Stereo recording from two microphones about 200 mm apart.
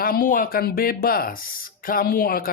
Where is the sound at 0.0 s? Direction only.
45° left (ahead or behind).